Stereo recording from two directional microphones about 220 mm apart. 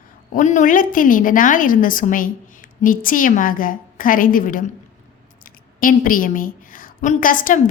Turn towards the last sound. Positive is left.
turn(degrees=40)  # may be behind; listen again after turning